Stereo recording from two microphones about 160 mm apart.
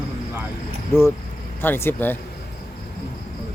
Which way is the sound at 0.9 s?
15° left (ahead or behind).